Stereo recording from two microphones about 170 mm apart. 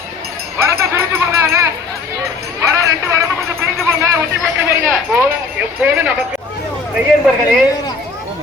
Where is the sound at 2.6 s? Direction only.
20° right (ahead or behind).